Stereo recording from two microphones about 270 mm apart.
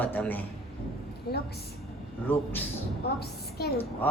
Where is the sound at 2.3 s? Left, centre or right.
Centre.